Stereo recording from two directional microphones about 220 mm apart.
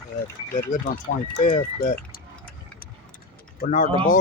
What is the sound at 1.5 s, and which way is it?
Speech, 40° left (ahead or behind).